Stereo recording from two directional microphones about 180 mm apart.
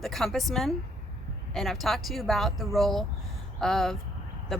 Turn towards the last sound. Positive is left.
turn(degrees=0)  # may be behind; listen again after turning